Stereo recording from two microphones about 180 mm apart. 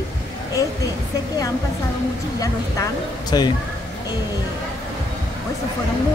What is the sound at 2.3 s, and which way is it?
Speech, 20° left (ahead or behind).